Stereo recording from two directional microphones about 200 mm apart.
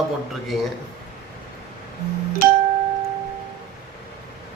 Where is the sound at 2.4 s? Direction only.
45° right (ahead or behind).